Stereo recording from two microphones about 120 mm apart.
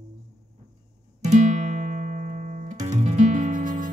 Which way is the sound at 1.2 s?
80° right.